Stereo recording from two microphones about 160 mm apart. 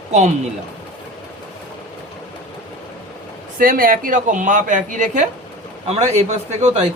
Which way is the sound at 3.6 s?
60° right (ahead or behind).